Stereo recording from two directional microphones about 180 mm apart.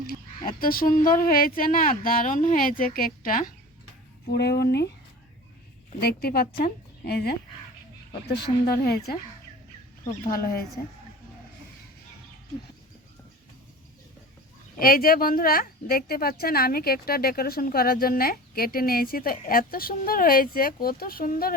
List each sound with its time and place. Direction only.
0.1 s speech: 55° left (ahead or behind)
4.3 s speech: 65° left (ahead or behind)
6.0 s a woman's voice: 60° left (ahead or behind)
8.6 s a woman's voice: 60° left (ahead or behind)
10.2 s a woman's voice: 55° left (ahead or behind)
14.8 s a woman's voice: 55° left (ahead or behind)